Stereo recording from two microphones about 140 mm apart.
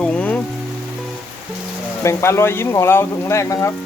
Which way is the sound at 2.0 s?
20° left (ahead or behind).